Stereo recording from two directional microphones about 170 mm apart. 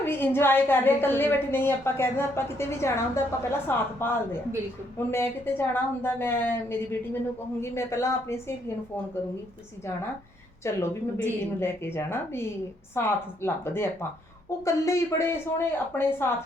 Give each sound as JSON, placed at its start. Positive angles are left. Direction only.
{"t": 0.0, "sound": "a woman's voice", "side_deg": 15}
{"t": 10.6, "sound": "a woman's voice", "side_deg": 15}